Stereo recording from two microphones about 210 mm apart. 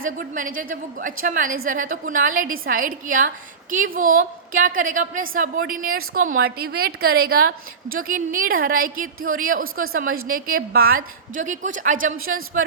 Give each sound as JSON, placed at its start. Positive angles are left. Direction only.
{"t": 0.0, "sound": "a woman's voice", "side_deg": -40}